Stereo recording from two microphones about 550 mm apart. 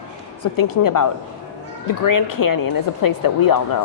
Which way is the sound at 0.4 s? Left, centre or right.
Left.